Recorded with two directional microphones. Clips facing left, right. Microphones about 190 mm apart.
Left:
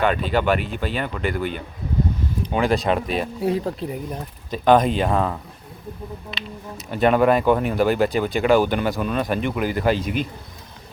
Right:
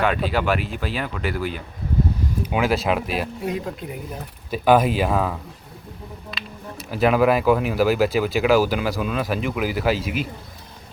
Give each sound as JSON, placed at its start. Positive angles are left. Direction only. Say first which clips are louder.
{"t": 0.0, "sound": "speech", "louder": "left 1 dB", "side_deg": 0}
{"t": 3.4, "sound": "speech", "louder": "left 4 dB", "side_deg": 35}
{"t": 4.5, "sound": "speech", "louder": "left 1 dB", "side_deg": -5}
{"t": 6.9, "sound": "speech", "louder": "left 1 dB", "side_deg": -5}